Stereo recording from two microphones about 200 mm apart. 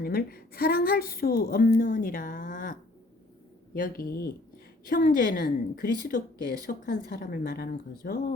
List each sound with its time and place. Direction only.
0.0 s a woman's voice: 50° left (ahead or behind)
3.8 s a woman's voice: 45° left (ahead or behind)